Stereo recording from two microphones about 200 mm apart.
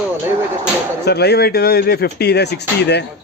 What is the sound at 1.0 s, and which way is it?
Speech, 55° left (ahead or behind).